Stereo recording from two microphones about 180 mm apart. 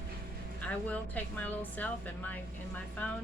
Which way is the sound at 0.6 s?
10° left (ahead or behind).